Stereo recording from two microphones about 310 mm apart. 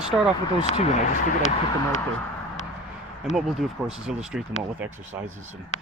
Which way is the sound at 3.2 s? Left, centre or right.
Centre.